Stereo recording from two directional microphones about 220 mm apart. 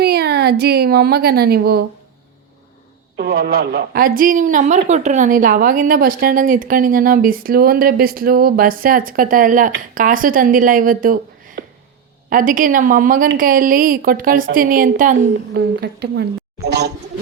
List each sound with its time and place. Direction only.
0.0 s a woman's voice: 45° right (ahead or behind)
3.2 s a woman's voice: 45° right (ahead or behind)
15.5 s a woman's voice: 45° right (ahead or behind)